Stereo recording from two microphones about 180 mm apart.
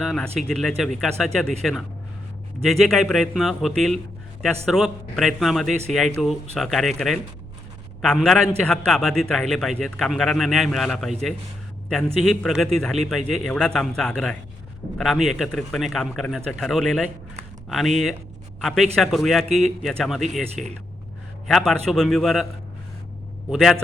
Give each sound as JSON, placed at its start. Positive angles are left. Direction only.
{"t": 0.0, "sound": "a man's voice", "side_deg": 0}
{"t": 8.0, "sound": "a man's voice", "side_deg": 0}
{"t": 23.5, "sound": "a man's voice", "side_deg": 0}